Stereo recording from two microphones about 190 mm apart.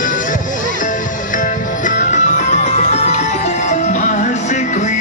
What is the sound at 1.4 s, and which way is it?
Music, 45° left (ahead or behind).